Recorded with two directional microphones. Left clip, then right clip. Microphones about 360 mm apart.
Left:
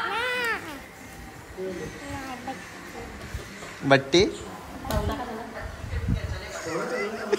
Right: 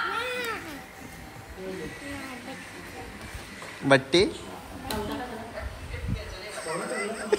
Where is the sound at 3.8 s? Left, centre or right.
Centre.